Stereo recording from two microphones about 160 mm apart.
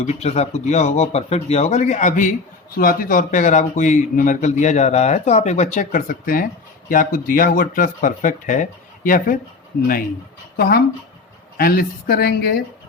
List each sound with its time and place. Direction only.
0.0 s a man's voice: 45° left (ahead or behind)
2.7 s a man's voice: 65° left (ahead or behind)
10.6 s speech: 75° left (ahead or behind)